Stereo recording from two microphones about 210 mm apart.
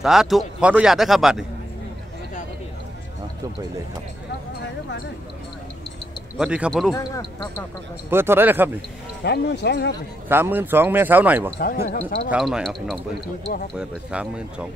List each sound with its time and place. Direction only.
0.0 s speech: centre (ahead or behind)
6.3 s speech: 5° right (ahead or behind)
6.9 s speech: 20° left (ahead or behind)
8.1 s speech: 10° right (ahead or behind)
9.2 s speech: 50° left (ahead or behind)
10.2 s speech: 10° right (ahead or behind)
11.6 s speech: 45° left (ahead or behind)
12.3 s speech: 5° right (ahead or behind)